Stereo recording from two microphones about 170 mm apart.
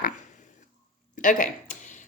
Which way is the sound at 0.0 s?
45° left (ahead or behind).